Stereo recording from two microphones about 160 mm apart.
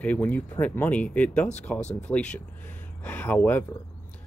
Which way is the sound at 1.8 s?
45° left (ahead or behind).